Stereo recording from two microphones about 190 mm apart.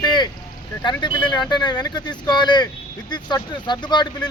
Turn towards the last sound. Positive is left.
turn(degrees=25)  # may be behind; listen again after turning